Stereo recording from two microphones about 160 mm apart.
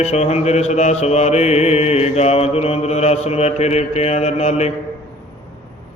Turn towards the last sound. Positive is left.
turn(degrees=40)  # may be behind; listen again after turning